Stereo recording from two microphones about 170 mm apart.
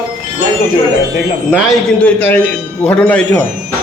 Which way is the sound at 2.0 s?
10° left (ahead or behind).